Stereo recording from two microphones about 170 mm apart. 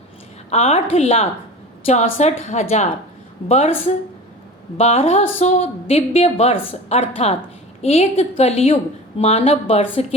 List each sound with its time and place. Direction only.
0.5 s a woman's voice: 35° left (ahead or behind)